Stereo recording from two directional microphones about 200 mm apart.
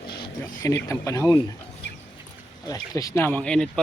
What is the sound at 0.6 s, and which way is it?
Speech, 15° left (ahead or behind).